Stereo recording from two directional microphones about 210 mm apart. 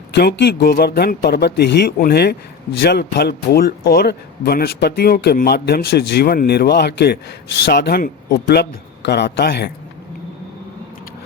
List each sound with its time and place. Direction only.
0.1 s speech: 50° left (ahead or behind)